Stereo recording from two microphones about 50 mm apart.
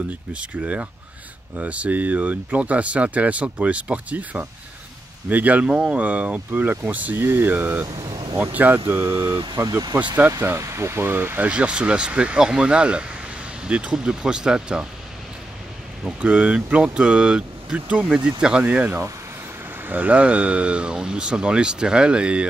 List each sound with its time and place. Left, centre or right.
0.3 s speech: right
7.2 s speech: right
8.7 s speech: right
9.9 s speech: right
10.6 s speech: right
11.3 s speech: right
16.2 s speech: right
18.1 s speech: centre
18.6 s speech: right